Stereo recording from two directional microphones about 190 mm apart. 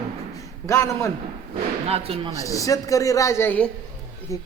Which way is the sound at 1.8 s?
30° right (ahead or behind).